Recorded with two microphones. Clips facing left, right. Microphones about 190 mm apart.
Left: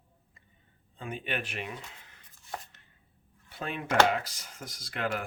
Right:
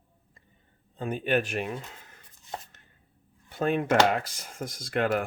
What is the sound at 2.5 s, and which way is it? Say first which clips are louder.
Chopping: right 2 dB; 20° right (ahead or behind).